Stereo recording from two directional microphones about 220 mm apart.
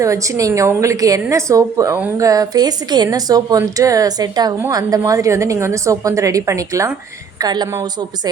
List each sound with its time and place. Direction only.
0.0 s a woman's voice: 15° right (ahead or behind)